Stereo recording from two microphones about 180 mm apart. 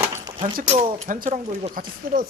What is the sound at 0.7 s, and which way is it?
Speech, 35° right (ahead or behind).